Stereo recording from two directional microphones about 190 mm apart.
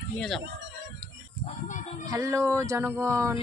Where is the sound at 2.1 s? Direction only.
15° right (ahead or behind).